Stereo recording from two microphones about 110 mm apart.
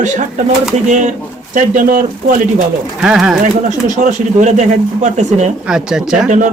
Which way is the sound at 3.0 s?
5° right (ahead or behind).